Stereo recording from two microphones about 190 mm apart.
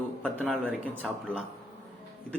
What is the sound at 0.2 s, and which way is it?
A man's voice, 5° left (ahead or behind).